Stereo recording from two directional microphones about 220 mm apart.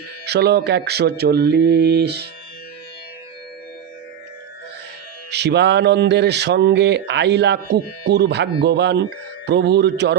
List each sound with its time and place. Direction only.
0.3 s speech: 50° right (ahead or behind)
5.3 s speech: 50° right (ahead or behind)